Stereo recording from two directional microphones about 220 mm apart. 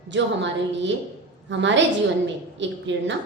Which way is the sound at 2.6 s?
55° right (ahead or behind).